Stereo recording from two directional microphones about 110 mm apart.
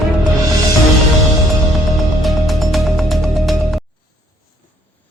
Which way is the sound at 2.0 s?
Centre (ahead or behind).